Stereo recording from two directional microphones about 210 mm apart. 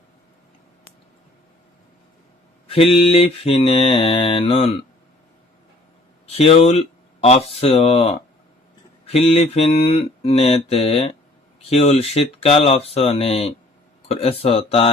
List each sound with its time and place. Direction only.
2.6 s mantra: 25° left (ahead or behind)
6.2 s speech: 30° left (ahead or behind)
9.0 s mantra: 30° left (ahead or behind)